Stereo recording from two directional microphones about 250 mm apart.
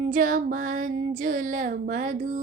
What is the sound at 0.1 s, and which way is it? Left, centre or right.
Female singing, right.